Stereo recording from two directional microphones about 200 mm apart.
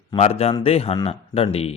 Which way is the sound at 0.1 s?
30° left (ahead or behind).